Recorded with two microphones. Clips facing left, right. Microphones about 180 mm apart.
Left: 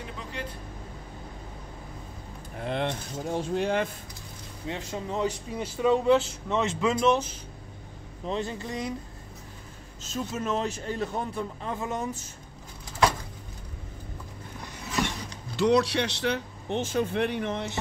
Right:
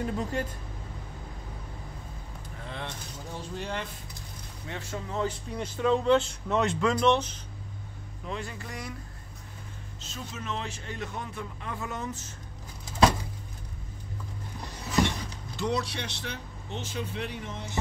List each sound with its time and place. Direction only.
0.0 s speech: 45° right (ahead or behind)
2.5 s speech: 65° left (ahead or behind)
4.6 s speech: 15° left (ahead or behind)
8.3 s speech: 25° left (ahead or behind)
10.1 s a man's voice: 45° left (ahead or behind); by 12.0 s 25° left (ahead or behind)
15.5 s speech: 75° left (ahead or behind)